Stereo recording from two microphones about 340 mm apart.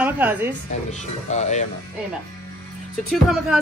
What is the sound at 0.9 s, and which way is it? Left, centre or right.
Speech, centre.